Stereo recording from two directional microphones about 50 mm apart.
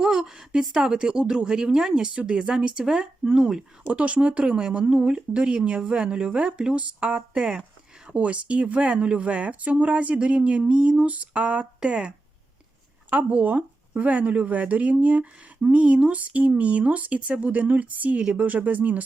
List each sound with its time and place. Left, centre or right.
0.0 s a woman's voice: centre
3.8 s speech: right
8.0 s speech: right
13.1 s speech: right